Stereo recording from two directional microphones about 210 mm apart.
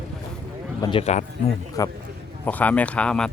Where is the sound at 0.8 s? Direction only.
25° left (ahead or behind).